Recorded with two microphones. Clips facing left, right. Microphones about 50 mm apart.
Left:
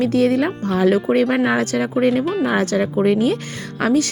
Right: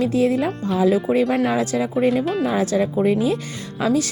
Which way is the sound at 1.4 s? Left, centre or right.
Left.